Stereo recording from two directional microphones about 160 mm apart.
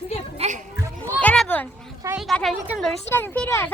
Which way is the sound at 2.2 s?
Centre (ahead or behind).